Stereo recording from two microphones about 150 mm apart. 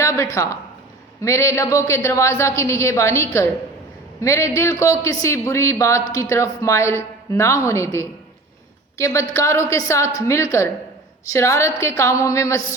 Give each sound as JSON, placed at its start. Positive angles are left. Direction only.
{"t": 0.0, "sound": "speech", "side_deg": 20}